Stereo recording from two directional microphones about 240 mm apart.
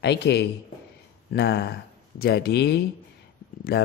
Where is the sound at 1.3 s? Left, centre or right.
Left.